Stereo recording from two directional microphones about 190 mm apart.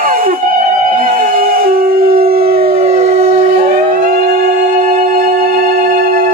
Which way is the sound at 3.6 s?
50° right (ahead or behind).